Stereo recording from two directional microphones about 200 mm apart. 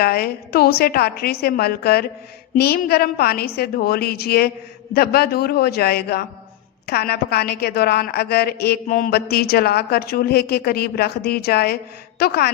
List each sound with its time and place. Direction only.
0.0 s a woman's voice: 50° left (ahead or behind)